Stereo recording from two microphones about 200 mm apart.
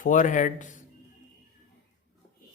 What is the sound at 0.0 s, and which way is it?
Speech, 40° left (ahead or behind).